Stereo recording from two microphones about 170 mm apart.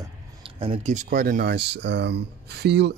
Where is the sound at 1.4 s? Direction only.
90° right.